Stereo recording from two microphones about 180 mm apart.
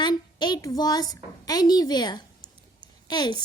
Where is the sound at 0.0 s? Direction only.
25° left (ahead or behind).